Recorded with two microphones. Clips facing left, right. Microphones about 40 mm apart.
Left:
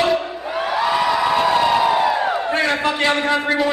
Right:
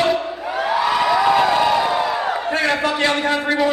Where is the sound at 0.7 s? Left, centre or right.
Centre.